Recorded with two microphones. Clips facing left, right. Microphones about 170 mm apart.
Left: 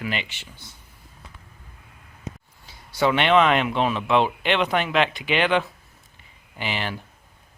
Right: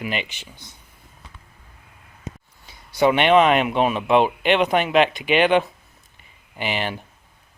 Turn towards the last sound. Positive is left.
turn(degrees=-20)  # may be behind; listen again after turning